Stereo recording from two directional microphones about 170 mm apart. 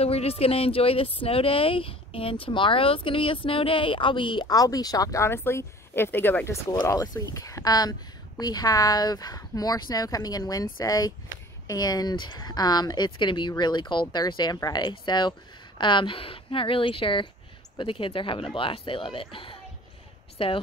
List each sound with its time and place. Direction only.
0.0 s a woman's voice: 35° left (ahead or behind)